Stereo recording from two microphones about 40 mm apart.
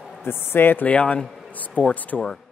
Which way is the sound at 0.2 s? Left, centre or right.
Left.